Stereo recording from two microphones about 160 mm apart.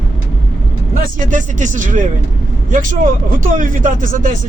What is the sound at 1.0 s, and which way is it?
Speech, 55° right (ahead or behind).